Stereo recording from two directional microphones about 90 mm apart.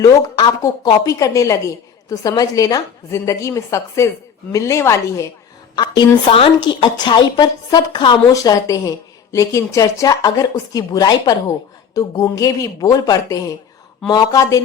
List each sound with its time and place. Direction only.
0.0 s a woman's voice: 40° left (ahead or behind)
5.7 s a woman's voice: 55° left (ahead or behind)
6.2 s speech: 85° left
6.9 s a woman's voice: 55° left (ahead or behind)
8.3 s a woman's voice: 40° left (ahead or behind)